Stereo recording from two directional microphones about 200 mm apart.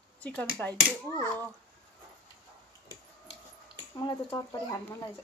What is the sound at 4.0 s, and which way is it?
Speech, 20° left (ahead or behind).